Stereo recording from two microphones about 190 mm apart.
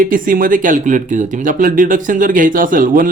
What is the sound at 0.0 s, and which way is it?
Speech, 45° right (ahead or behind).